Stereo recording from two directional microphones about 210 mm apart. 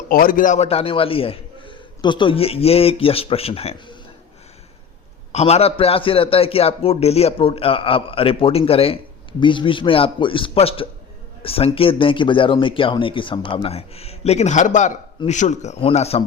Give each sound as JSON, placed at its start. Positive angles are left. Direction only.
{"t": 0.1, "sound": "a man's voice", "side_deg": 40}
{"t": 5.3, "sound": "a man's voice", "side_deg": 30}